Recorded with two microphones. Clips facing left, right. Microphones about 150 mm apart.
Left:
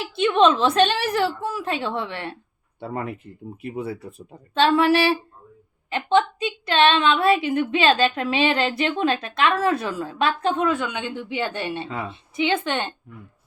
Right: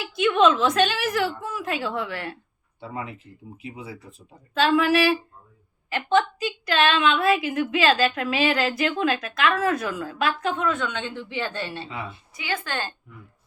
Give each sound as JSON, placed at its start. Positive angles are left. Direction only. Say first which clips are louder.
{"t": 0.2, "sound": "a woman's voice", "louder": "left 1 dB", "side_deg": 30}
{"t": 2.8, "sound": "speech", "louder": "left 5 dB", "side_deg": 55}
{"t": 4.5, "sound": "a woman's voice", "louder": "left 2 dB", "side_deg": 30}
{"t": 10.8, "sound": "a woman's voice", "louder": "left 2 dB", "side_deg": 10}